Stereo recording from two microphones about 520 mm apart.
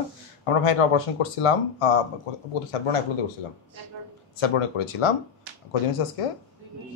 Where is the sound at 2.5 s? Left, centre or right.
Left.